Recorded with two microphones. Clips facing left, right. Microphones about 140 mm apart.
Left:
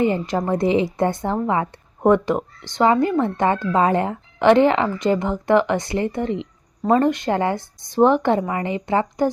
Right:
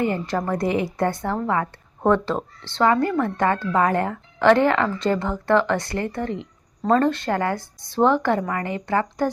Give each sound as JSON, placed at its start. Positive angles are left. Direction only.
{"t": 0.0, "sound": "a woman's voice", "side_deg": 20}